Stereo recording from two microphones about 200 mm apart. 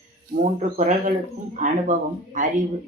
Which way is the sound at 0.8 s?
40° right (ahead or behind).